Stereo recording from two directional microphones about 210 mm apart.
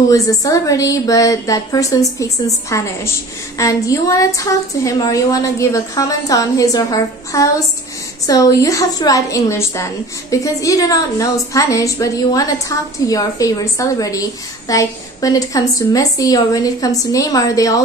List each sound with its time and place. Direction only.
0.1 s a woman's voice: 15° left (ahead or behind)